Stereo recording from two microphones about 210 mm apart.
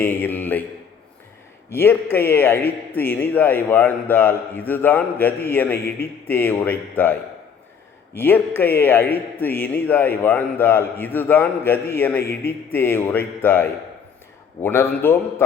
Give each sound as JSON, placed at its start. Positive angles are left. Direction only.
{"t": 0.0, "sound": "a man's voice", "side_deg": 10}
{"t": 1.7, "sound": "a man's voice", "side_deg": 10}
{"t": 12.2, "sound": "a man's voice", "side_deg": 45}
{"t": 12.5, "sound": "a man's voice", "side_deg": 10}